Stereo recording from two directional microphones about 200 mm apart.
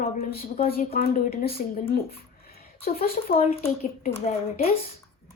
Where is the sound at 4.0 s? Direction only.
35° left (ahead or behind).